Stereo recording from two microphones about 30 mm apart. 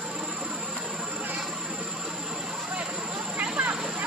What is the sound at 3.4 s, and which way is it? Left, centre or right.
Vehicle, right.